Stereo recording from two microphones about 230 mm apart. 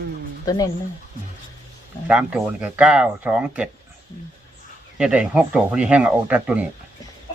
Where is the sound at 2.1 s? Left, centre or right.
Centre.